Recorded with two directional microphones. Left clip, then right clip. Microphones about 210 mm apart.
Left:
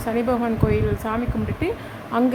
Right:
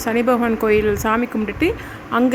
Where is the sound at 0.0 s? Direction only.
20° right (ahead or behind).